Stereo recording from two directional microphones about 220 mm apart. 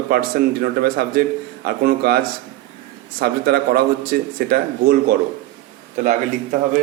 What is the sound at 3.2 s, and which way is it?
A man's voice, 45° right (ahead or behind).